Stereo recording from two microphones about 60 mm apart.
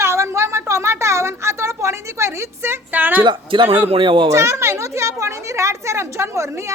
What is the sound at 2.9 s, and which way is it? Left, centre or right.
Speech, right.